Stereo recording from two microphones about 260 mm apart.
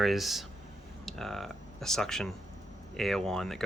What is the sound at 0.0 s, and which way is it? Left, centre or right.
Speech, centre.